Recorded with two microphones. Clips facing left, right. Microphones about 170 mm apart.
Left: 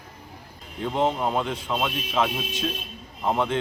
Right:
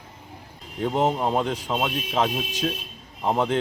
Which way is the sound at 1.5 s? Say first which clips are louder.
Right 1 dB; 40° right (ahead or behind).